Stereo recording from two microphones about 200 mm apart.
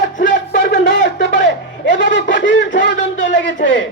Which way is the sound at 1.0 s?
65° left (ahead or behind).